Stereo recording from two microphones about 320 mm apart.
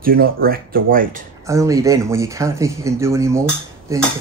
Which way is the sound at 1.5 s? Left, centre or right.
Centre.